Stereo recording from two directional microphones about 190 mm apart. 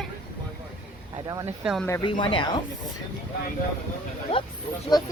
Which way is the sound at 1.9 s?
25° left (ahead or behind).